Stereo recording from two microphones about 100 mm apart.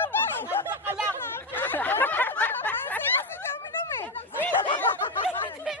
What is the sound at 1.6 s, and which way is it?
Snicker, 20° left (ahead or behind).